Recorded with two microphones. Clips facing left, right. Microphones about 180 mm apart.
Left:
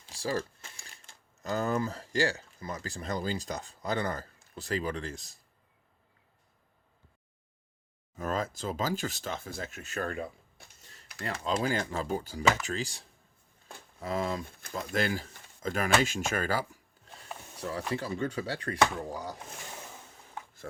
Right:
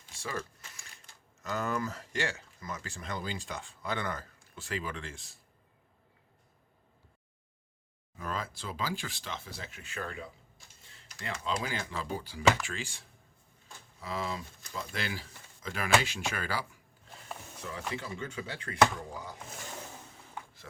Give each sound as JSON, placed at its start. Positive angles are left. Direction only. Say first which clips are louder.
{"t": 0.1, "sound": "speech", "louder": "left 6 dB", "side_deg": 35}
{"t": 8.1, "sound": "speech", "louder": "left 5 dB", "side_deg": 45}